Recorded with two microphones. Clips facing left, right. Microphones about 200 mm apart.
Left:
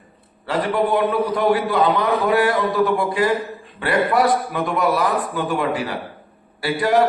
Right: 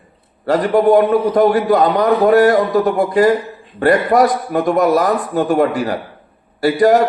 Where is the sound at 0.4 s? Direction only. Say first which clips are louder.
Right 8 dB; 45° right (ahead or behind).